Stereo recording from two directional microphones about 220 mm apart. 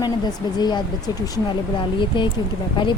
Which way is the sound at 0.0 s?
20° left (ahead or behind).